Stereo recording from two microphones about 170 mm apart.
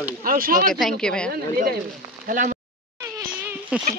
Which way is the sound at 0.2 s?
55° right (ahead or behind).